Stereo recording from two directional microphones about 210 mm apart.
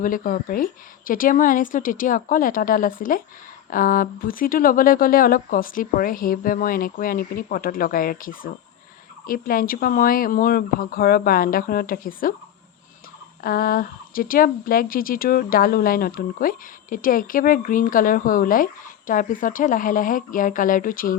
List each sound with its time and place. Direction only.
0.0 s speech: 40° left (ahead or behind)
13.4 s speech: 45° left (ahead or behind)